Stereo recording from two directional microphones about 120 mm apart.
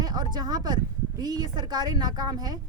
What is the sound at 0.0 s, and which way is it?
A woman's voice, 35° right (ahead or behind).